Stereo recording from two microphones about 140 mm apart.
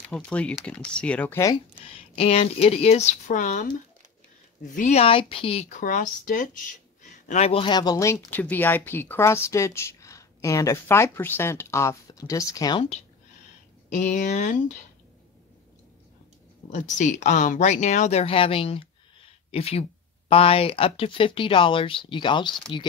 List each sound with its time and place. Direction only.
0.1 s speech: 10° left (ahead or behind)
2.1 s speech: 45° left (ahead or behind)
4.7 s speech: 50° left (ahead or behind)
5.7 s speech: 65° left (ahead or behind)
7.2 s speech: 50° left (ahead or behind); by 12.8 s 25° left (ahead or behind)
13.8 s speech: 60° left (ahead or behind)
16.6 s speech: 60° left (ahead or behind); by 22.8 s 35° left (ahead or behind)